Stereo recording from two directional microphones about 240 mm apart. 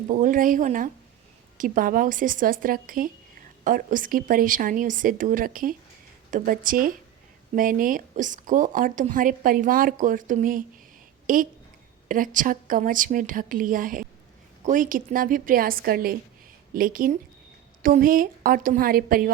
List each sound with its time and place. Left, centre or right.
0.1 s a woman's voice: right